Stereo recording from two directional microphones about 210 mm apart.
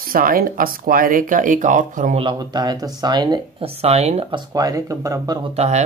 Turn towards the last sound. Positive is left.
turn(degrees=-35)  # may be behind; listen again after turning